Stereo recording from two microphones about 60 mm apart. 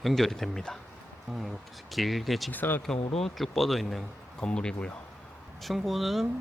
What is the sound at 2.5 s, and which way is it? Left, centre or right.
Speech, left.